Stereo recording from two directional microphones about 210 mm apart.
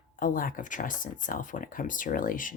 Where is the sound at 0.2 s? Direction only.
40° left (ahead or behind).